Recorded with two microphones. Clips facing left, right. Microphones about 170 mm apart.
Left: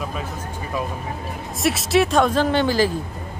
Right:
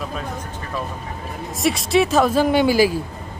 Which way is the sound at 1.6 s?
Centre (ahead or behind).